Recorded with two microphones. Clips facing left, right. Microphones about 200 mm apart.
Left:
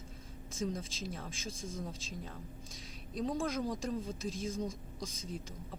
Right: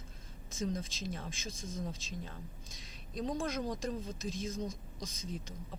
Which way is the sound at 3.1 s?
5° left (ahead or behind).